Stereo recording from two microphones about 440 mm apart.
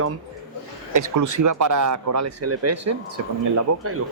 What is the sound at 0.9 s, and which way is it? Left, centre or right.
Speech, right.